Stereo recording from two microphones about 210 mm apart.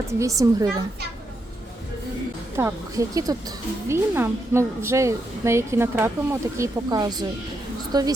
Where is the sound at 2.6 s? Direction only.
15° right (ahead or behind).